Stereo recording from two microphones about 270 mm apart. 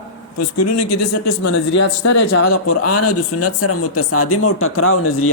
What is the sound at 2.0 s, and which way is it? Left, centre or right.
Speech, left.